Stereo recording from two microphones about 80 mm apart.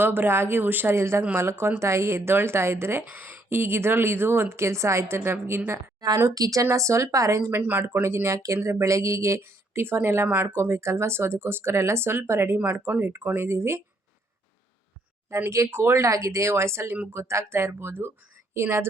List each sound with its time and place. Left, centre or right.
0.0 s a woman's voice: right
6.1 s a woman's voice: right
7.6 s a woman's voice: right
12.5 s speech: right
15.4 s a woman's voice: right